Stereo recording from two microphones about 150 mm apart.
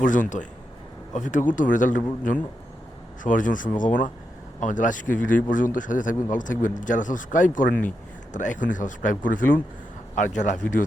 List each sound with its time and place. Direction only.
0.0 s speech: 60° left (ahead or behind)
3.2 s speech: 60° left (ahead or behind)